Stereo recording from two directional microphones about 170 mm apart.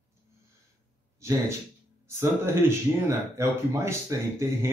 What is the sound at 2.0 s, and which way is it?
A man's voice, 15° right (ahead or behind).